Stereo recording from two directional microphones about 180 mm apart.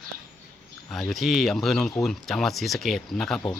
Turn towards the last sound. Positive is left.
turn(degrees=0)  # may be behind; listen again after turning